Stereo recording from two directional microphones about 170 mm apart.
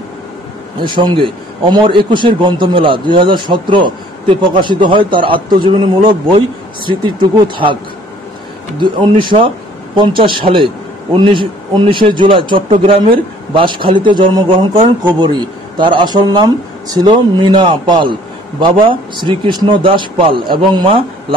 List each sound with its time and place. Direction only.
0.8 s a man's voice: 25° right (ahead or behind)
8.7 s a man's voice: 30° right (ahead or behind)